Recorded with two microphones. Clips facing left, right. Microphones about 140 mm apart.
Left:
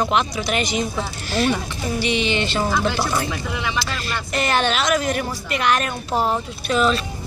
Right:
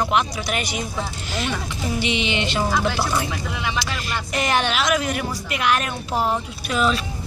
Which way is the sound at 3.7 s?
15° right (ahead or behind).